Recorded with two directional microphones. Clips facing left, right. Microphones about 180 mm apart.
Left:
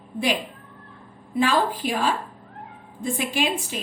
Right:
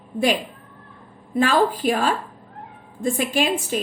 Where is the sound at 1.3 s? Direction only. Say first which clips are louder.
Right 3 dB; 45° right (ahead or behind).